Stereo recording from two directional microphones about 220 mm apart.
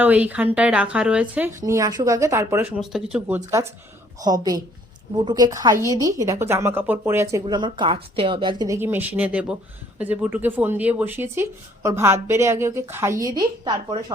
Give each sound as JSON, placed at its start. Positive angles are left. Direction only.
{"t": 0.0, "sound": "speech", "side_deg": -5}